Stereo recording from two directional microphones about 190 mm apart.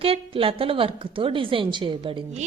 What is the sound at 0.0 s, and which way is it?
A woman's voice, 30° right (ahead or behind).